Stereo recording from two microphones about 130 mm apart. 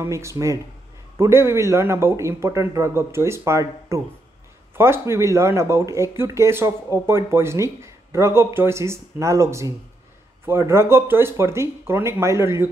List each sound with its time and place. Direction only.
0.0 s speech: 20° right (ahead or behind)